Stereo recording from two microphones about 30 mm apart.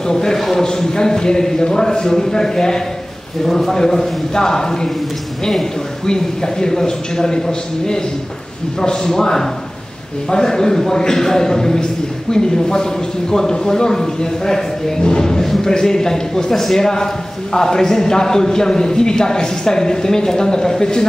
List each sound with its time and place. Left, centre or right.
0.0 s a man's voice: left
0.4 s a man's voice: centre
0.7 s a man's voice: left
6.0 s a man's voice: left